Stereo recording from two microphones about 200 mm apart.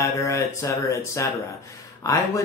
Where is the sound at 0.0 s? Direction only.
15° left (ahead or behind).